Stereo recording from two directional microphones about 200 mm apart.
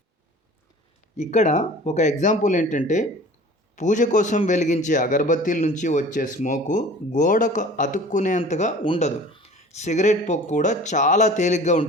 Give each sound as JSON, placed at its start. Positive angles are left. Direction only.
{"t": 1.1, "sound": "a man's voice", "side_deg": 35}